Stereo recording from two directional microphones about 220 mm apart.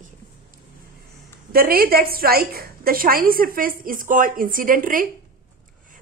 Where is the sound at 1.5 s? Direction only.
45° right (ahead or behind).